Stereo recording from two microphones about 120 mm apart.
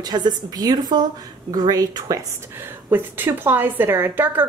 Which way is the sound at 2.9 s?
15° right (ahead or behind).